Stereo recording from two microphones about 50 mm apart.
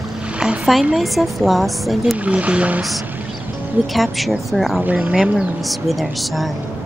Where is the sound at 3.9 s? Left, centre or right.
Centre.